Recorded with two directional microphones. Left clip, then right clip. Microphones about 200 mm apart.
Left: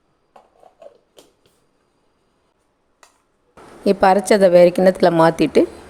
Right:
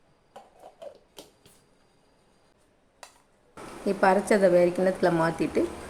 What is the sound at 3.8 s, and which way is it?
A woman's voice, 50° left (ahead or behind).